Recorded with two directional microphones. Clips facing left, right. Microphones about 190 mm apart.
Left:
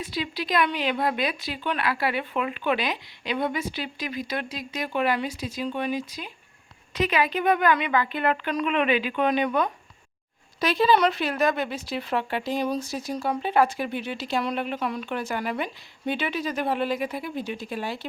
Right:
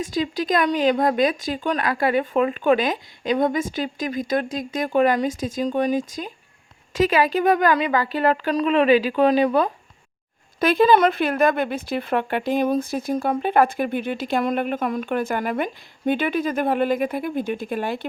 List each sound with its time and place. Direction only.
0.0 s a woman's voice: 45° right (ahead or behind)
10.6 s a woman's voice: 50° right (ahead or behind)